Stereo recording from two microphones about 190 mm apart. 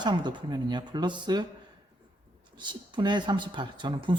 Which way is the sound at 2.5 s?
25° right (ahead or behind).